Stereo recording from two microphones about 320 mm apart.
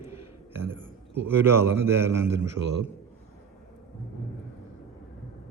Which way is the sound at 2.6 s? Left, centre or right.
Right.